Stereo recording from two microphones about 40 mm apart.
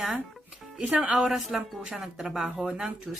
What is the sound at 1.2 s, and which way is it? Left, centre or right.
Speech, centre.